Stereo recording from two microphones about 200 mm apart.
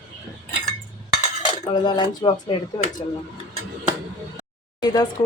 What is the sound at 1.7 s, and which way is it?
Speech, 25° left (ahead or behind).